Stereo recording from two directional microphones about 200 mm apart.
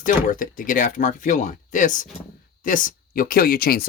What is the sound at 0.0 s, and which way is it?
Speech, 40° left (ahead or behind).